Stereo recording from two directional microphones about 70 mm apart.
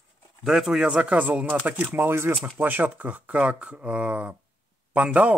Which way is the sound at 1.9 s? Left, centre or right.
Right.